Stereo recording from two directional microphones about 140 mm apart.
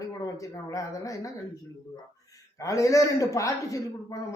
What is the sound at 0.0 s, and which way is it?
Speech, 25° left (ahead or behind).